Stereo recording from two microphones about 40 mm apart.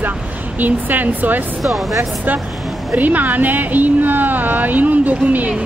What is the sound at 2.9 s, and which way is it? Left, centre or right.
Speech, right.